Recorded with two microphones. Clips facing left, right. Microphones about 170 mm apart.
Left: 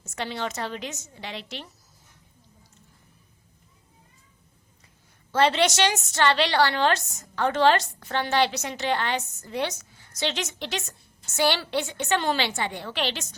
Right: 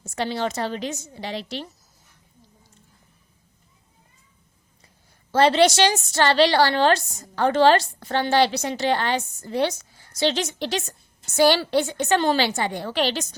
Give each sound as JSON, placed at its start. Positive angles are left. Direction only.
{"t": 0.0, "sound": "a woman's voice", "side_deg": -35}
{"t": 5.3, "sound": "a woman's voice", "side_deg": -35}